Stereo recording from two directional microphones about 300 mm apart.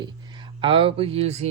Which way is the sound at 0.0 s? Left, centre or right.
Centre.